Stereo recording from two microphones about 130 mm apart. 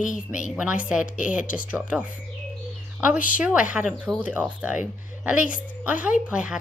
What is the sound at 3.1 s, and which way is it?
Speech, 90° left.